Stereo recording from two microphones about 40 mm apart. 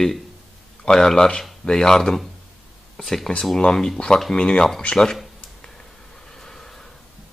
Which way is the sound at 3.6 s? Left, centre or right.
Centre.